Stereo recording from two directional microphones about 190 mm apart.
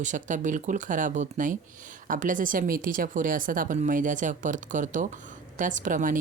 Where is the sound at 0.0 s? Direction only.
40° right (ahead or behind).